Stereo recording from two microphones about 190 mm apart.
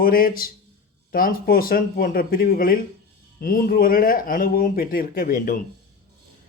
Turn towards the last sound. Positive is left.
turn(degrees=45)  # may be behind; listen again after turning